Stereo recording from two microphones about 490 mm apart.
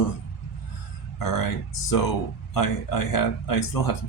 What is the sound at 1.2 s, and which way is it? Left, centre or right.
Speech, left.